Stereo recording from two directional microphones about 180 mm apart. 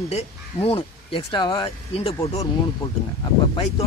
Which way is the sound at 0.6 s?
30° left (ahead or behind).